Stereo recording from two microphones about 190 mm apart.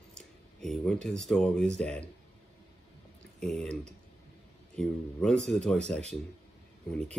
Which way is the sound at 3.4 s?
Centre (ahead or behind).